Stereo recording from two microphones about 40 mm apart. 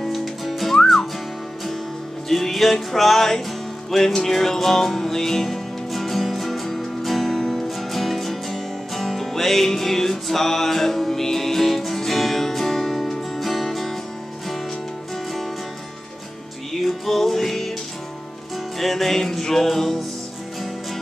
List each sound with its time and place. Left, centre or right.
0.0 s music: centre
2.2 s music: centre
16.7 s music: centre
18.8 s music: centre